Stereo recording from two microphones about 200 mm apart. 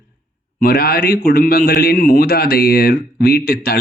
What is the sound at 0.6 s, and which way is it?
Speech, 50° left (ahead or behind).